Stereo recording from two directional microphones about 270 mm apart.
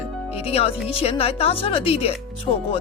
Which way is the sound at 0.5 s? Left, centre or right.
Left.